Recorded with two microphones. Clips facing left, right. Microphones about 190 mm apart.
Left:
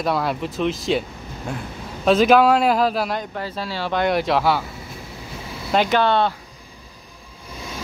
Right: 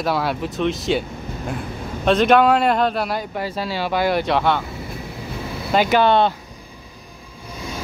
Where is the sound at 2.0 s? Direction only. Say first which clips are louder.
Even; centre (ahead or behind).